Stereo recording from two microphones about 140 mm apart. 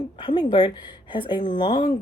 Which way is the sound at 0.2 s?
35° left (ahead or behind).